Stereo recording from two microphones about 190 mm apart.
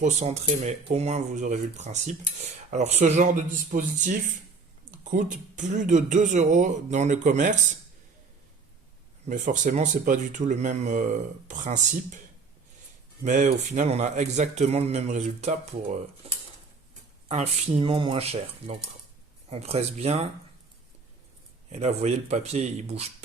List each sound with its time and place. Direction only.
0.0 s speech: 35° right (ahead or behind)
9.3 s speech: 40° right (ahead or behind)
13.2 s speech: 40° right (ahead or behind)
21.7 s speech: 35° right (ahead or behind)